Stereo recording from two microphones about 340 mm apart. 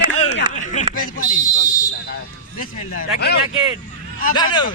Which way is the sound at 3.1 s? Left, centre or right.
Left.